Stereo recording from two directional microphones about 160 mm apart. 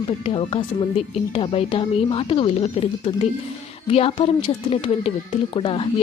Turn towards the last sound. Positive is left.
turn(degrees=35)  # may be behind; listen again after turning